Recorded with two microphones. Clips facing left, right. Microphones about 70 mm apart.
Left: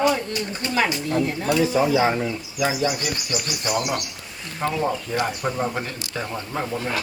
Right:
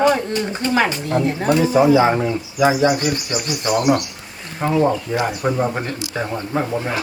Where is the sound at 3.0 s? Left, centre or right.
Right.